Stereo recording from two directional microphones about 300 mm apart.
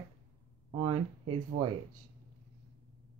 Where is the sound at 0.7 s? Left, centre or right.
Centre.